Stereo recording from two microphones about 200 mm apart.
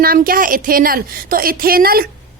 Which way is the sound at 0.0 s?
45° right (ahead or behind).